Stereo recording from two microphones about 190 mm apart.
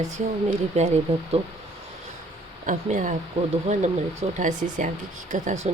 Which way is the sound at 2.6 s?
40° right (ahead or behind).